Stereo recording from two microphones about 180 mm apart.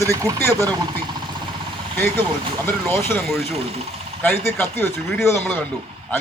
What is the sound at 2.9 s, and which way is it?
Speech, 10° left (ahead or behind).